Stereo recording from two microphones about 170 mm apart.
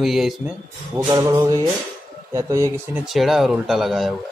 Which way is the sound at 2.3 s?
15° right (ahead or behind).